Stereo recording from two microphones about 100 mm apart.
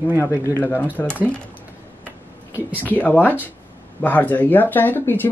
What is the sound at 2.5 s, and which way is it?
Speech, 15° right (ahead or behind).